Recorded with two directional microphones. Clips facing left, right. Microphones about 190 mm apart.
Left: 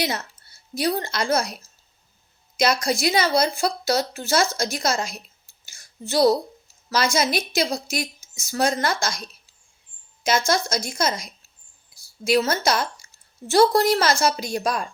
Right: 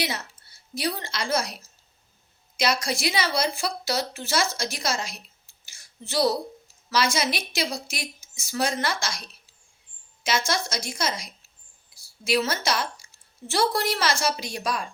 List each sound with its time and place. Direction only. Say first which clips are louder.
0.8 s a woman's voice: left 6 dB; 45° left (ahead or behind)
2.6 s a woman's voice: left 4 dB; 45° left (ahead or behind)
5.6 s whispering: left 6 dB; 45° left (ahead or behind)
6.9 s a woman's voice: left 3 dB; 45° left (ahead or behind)
10.2 s a woman's voice: left 5 dB; 45° left (ahead or behind)